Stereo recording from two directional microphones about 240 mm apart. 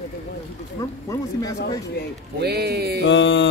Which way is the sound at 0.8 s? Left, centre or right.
Centre.